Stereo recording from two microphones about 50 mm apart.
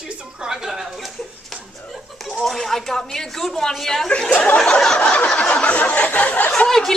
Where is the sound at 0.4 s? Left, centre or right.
Centre.